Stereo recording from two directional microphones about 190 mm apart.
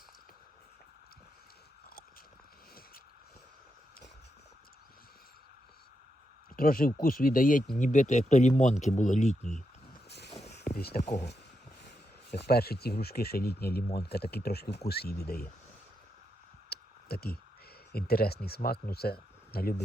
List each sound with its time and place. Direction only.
6.6 s speech: 50° left (ahead or behind)
10.8 s speech: 55° left (ahead or behind)
11.0 s speech: 40° left (ahead or behind)
12.3 s speech: 60° left (ahead or behind)
16.6 s a sound: 55° left (ahead or behind)
17.9 s speech: 55° left (ahead or behind)